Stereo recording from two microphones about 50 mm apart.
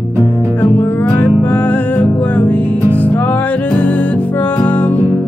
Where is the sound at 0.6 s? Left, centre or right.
Left.